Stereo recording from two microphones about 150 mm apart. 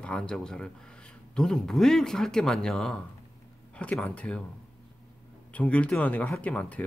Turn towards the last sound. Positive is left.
turn(degrees=10)  # may be behind; listen again after turning